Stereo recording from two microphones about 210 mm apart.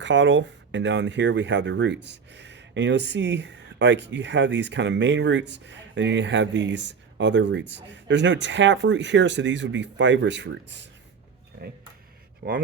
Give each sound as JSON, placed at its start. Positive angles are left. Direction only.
{"t": 0.0, "sound": "speech", "side_deg": -60}
{"t": 12.4, "sound": "speech", "side_deg": -40}